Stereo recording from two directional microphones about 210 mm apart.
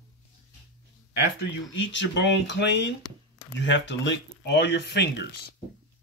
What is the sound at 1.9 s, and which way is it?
Speech, 60° left (ahead or behind).